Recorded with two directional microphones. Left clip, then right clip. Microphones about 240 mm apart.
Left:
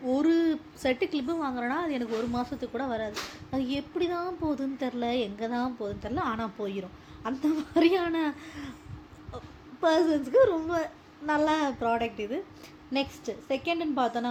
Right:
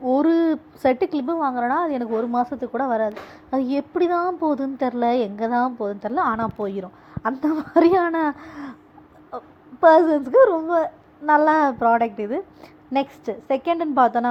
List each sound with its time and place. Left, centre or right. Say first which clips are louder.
0.0 s a sound: right 7 dB; centre
1.6 s a woman's voice: right 9 dB; centre
9.8 s a woman's voice: right 11 dB; centre